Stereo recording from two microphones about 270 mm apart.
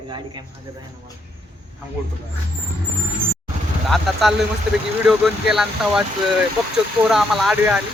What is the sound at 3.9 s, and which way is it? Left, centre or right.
Speech, centre.